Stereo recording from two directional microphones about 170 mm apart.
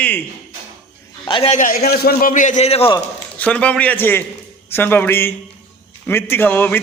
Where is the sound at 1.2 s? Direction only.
30° left (ahead or behind).